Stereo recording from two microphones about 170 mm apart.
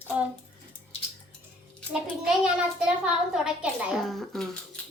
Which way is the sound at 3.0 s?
5° right (ahead or behind).